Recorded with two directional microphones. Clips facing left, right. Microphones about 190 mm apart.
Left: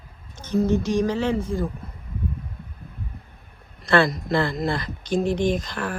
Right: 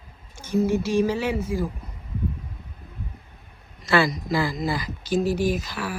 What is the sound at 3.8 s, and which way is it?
Speech, centre (ahead or behind).